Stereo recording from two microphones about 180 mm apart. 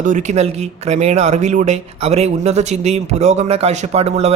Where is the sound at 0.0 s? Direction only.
45° right (ahead or behind).